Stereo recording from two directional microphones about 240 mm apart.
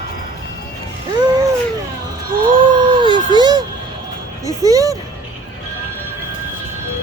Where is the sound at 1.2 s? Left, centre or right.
Centre.